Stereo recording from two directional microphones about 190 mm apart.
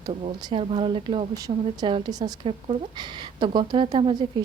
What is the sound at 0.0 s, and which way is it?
A woman's voice, 30° right (ahead or behind).